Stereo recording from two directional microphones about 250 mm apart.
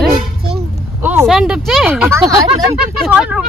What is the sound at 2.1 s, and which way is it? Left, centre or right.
Speech, centre.